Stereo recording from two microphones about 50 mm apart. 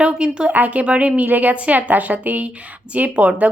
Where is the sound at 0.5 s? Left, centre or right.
Right.